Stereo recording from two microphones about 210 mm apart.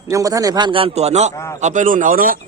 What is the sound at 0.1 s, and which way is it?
A man's voice, 15° right (ahead or behind).